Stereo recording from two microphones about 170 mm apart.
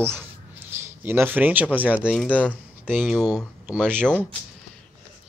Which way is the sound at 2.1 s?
10° left (ahead or behind).